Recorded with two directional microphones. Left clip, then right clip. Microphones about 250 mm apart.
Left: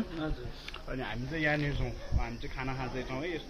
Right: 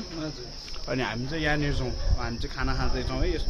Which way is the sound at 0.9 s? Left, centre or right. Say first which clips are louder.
Right 10 dB; right.